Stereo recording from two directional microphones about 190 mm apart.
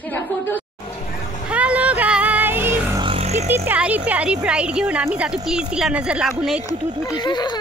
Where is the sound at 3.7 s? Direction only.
10° right (ahead or behind).